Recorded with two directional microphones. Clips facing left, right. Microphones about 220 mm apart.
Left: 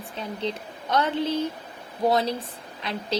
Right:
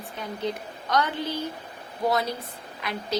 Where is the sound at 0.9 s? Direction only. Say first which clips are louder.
Left 3 dB; 25° left (ahead or behind).